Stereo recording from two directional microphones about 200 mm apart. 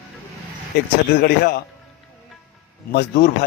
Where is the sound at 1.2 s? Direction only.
50° left (ahead or behind).